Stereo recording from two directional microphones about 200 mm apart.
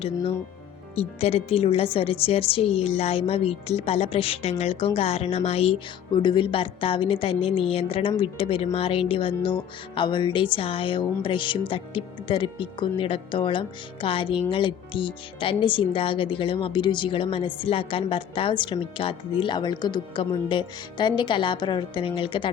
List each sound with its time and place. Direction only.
0.9 s speech: 30° left (ahead or behind)